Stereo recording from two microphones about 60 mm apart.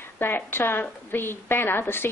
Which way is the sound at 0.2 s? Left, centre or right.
Left.